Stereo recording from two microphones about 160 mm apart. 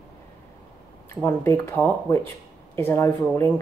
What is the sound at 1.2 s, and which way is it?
Speech, 15° left (ahead or behind).